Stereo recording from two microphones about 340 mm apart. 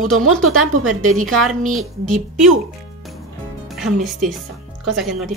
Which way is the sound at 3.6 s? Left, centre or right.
Centre.